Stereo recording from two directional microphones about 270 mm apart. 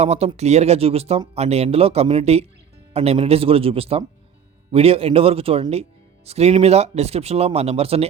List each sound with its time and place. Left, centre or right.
0.0 s speech: right